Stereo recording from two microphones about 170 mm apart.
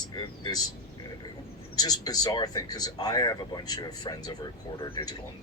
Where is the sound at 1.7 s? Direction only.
20° left (ahead or behind).